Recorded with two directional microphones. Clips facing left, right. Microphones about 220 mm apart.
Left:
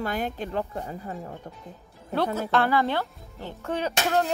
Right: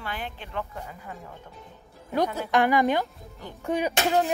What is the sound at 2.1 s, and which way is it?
Speech, 15° right (ahead or behind).